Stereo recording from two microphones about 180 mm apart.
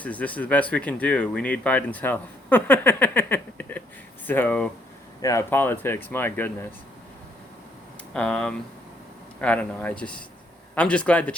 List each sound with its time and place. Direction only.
0.0 s speech: 10° left (ahead or behind)
8.1 s speech: 5° left (ahead or behind)